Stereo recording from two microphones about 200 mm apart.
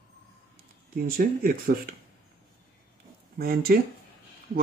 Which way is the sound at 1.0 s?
45° right (ahead or behind).